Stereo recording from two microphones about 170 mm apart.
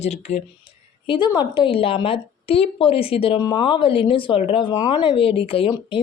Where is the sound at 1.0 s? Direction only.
30° left (ahead or behind).